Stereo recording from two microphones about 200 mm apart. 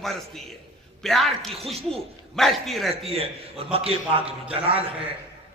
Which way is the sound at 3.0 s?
30° right (ahead or behind).